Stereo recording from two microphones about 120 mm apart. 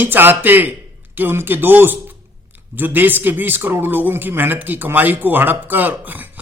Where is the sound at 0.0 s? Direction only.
15° right (ahead or behind).